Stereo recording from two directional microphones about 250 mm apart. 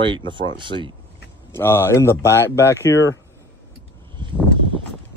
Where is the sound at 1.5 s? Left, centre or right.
Centre.